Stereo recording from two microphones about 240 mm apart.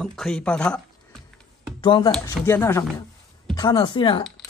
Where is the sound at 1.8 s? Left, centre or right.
Centre.